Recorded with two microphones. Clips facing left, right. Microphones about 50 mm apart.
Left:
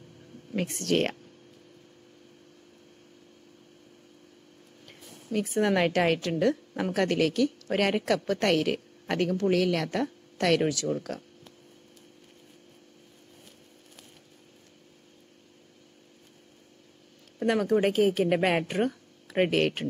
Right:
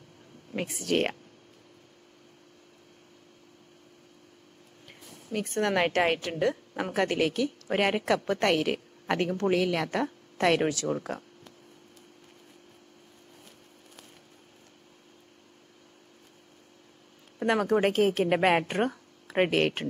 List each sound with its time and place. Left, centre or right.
0.5 s a woman's voice: centre
5.4 s a woman's voice: centre
5.8 s a woman's voice: centre
17.4 s a sound: centre
17.9 s a woman's voice: centre
18.3 s speech: centre